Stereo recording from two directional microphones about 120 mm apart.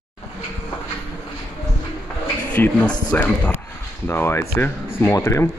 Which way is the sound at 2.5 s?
10° left (ahead or behind).